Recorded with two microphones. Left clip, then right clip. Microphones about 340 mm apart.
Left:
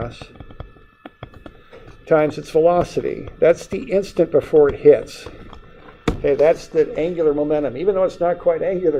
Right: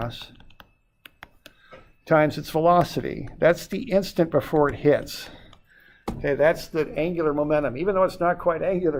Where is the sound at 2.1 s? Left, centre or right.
Right.